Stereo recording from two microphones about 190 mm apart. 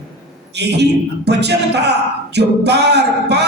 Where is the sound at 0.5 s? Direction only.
60° right (ahead or behind).